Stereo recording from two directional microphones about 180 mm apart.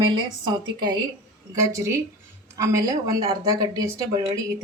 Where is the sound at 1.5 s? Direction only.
15° right (ahead or behind).